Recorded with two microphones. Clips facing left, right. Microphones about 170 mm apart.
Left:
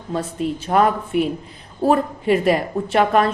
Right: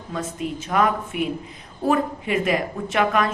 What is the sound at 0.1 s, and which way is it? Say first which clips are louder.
Speech: left 5 dB; 35° left (ahead or behind).